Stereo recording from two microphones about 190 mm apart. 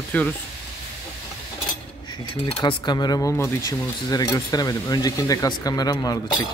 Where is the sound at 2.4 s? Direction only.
25° left (ahead or behind).